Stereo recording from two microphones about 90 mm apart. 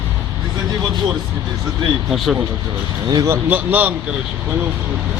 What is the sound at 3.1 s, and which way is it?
Speech, 35° right (ahead or behind).